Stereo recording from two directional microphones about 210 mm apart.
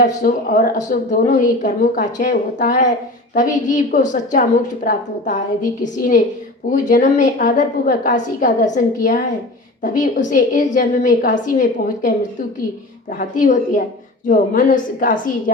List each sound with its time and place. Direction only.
0.0 s a woman's voice: 40° left (ahead or behind)